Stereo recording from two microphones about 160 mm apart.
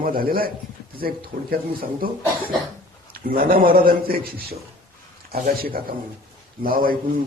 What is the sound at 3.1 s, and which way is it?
A man's voice, 65° right (ahead or behind).